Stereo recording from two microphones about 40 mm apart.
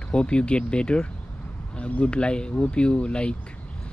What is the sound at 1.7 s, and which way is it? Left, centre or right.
Speech, left.